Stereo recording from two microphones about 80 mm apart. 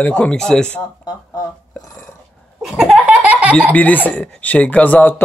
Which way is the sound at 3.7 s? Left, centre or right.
Left.